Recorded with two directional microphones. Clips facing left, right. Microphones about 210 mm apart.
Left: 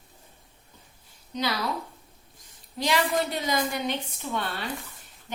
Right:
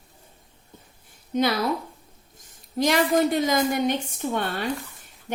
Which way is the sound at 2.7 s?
45° right (ahead or behind).